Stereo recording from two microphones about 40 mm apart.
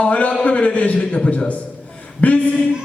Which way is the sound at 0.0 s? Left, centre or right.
Left.